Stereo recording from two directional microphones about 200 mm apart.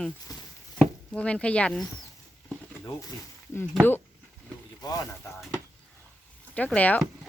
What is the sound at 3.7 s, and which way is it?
Speech, 10° left (ahead or behind).